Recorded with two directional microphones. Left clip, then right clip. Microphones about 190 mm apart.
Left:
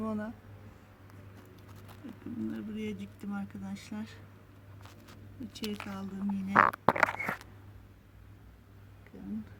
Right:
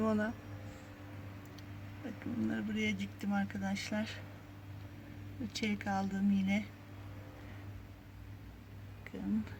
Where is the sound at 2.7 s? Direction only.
15° right (ahead or behind).